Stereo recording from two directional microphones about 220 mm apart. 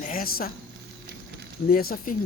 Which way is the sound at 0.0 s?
40° left (ahead or behind).